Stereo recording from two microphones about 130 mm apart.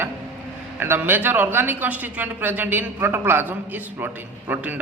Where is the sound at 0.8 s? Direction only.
15° right (ahead or behind).